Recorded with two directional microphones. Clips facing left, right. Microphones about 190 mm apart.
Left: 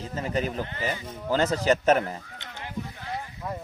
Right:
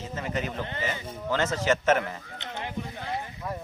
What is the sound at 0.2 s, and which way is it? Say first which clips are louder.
Speech: left 3 dB; 35° left (ahead or behind).